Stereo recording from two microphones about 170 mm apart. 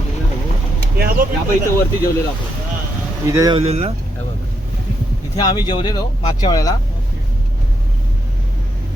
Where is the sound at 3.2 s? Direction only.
20° right (ahead or behind).